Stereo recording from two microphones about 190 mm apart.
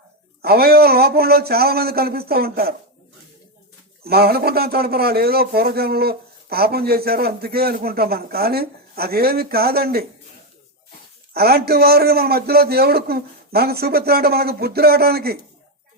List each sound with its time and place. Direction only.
0.4 s a man's voice: 55° right (ahead or behind)
4.0 s a man's voice: 55° right (ahead or behind)
11.3 s a man's voice: 55° right (ahead or behind)